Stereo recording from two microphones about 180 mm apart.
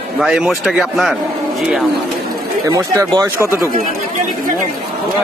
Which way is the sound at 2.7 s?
20° right (ahead or behind).